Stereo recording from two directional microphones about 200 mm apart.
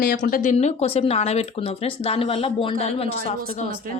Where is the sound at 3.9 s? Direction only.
40° right (ahead or behind).